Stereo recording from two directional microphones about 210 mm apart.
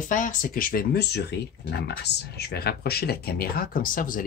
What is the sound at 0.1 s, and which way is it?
Speech, 40° left (ahead or behind).